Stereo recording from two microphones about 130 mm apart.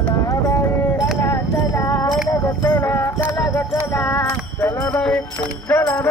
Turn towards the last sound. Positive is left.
turn(degrees=20)  # may be behind; listen again after turning